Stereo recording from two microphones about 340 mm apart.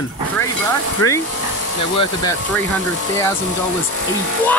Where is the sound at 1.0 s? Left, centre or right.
Left.